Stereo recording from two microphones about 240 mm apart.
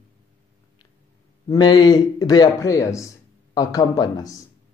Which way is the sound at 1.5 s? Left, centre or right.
Centre.